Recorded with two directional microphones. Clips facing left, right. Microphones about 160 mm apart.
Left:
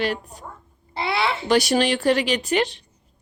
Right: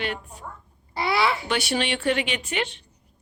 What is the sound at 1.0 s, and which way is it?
Speech, 25° left (ahead or behind).